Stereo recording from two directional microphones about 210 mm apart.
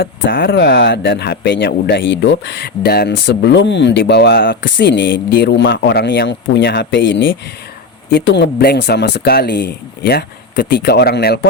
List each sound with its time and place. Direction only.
0.0 s speech: 50° left (ahead or behind)